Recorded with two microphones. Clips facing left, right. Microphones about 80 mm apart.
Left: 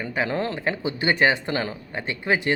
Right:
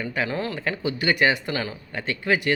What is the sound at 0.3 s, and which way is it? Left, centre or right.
Speech, left.